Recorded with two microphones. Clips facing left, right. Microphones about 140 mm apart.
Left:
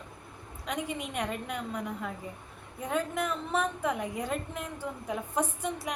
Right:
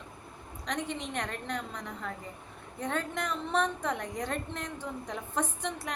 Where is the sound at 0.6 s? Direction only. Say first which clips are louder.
Left 1 dB; 10° left (ahead or behind).